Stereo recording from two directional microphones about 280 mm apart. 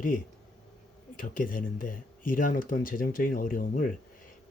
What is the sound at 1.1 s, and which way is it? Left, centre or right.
Speech, left.